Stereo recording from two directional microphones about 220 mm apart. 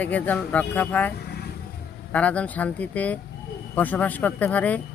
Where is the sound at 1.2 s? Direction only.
45° left (ahead or behind).